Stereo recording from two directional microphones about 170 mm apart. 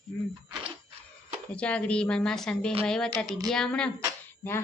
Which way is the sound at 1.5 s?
5° left (ahead or behind).